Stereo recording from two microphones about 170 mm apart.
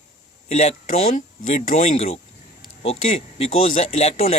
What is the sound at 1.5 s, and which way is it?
Speech, 45° left (ahead or behind).